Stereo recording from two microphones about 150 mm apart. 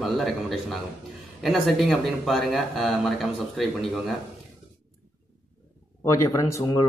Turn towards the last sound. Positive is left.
turn(degrees=20)  # may be behind; listen again after turning